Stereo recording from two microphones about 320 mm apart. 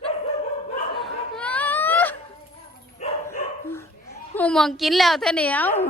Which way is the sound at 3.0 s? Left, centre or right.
Left.